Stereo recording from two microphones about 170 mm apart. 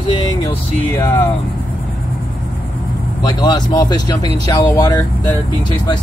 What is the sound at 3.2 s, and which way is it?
Speech, 25° left (ahead or behind).